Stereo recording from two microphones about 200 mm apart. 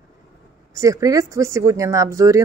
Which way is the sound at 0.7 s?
15° right (ahead or behind).